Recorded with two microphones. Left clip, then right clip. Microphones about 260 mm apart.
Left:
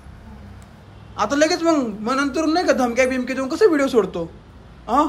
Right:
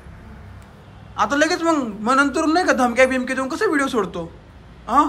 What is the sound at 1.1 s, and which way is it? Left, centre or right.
A man's voice, centre.